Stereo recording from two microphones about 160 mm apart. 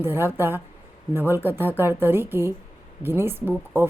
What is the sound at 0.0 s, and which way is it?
Speech, 15° right (ahead or behind).